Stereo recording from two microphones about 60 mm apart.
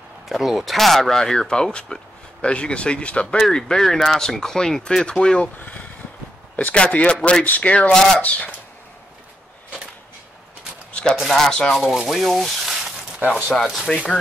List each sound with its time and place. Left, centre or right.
0.3 s speech: centre
5.6 s speech: left
10.9 s a sound: centre
11.2 s speech: centre
11.9 s speech: centre
13.8 s speech: centre